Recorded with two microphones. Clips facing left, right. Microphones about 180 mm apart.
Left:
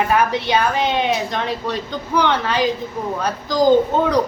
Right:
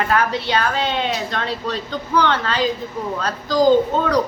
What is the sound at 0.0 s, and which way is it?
A woman's voice, 15° left (ahead or behind).